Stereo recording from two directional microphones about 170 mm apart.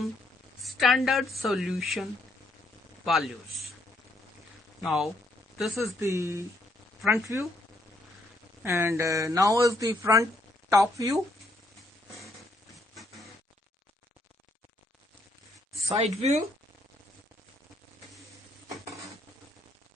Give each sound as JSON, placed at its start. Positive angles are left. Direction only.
{"t": 0.6, "sound": "a woman's voice", "side_deg": 0}
{"t": 4.8, "sound": "a man's voice", "side_deg": 0}
{"t": 6.0, "sound": "speech", "side_deg": -15}
{"t": 8.6, "sound": "speech", "side_deg": -15}
{"t": 15.9, "sound": "speech", "side_deg": -40}